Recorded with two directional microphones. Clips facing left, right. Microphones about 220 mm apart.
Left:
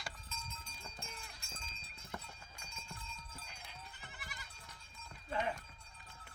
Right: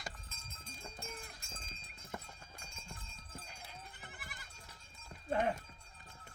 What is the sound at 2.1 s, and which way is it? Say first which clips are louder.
Clip-clop: right 1 dB; 45° right (ahead or behind).